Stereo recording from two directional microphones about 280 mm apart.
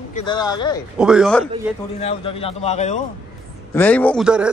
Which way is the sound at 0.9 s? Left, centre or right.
Centre.